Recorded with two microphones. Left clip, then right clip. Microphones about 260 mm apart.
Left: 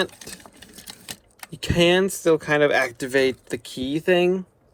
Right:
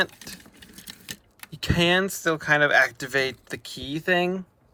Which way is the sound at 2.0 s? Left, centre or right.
Right.